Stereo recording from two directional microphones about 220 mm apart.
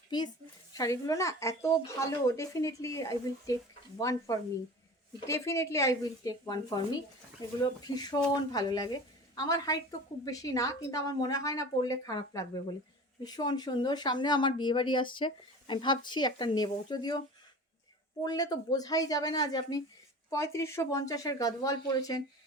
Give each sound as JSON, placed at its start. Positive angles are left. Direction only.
{"t": 0.7, "sound": "speech", "side_deg": 15}
{"t": 18.2, "sound": "speech", "side_deg": 20}